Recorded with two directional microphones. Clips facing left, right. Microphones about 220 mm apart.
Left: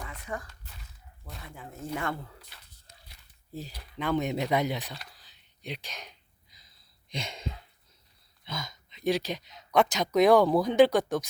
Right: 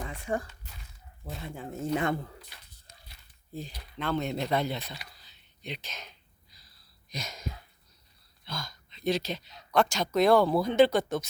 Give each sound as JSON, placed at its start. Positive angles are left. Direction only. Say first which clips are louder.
{"t": 0.0, "sound": "a sound", "louder": "right 6 dB", "side_deg": -30}
{"t": 1.4, "sound": "speech", "louder": "right 6 dB", "side_deg": -25}
{"t": 3.5, "sound": "speech", "louder": "even", "side_deg": 5}
{"t": 7.1, "sound": "speech", "louder": "left 2 dB", "side_deg": 30}
{"t": 8.4, "sound": "speech", "louder": "left 1 dB", "side_deg": 20}